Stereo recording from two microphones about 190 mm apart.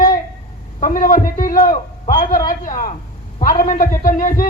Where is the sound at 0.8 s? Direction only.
45° left (ahead or behind).